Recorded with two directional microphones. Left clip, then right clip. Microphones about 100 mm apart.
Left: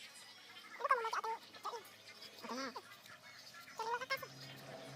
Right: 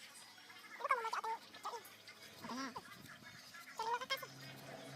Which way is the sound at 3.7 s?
5° left (ahead or behind).